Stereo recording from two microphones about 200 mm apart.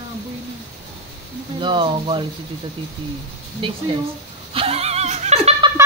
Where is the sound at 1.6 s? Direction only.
25° right (ahead or behind).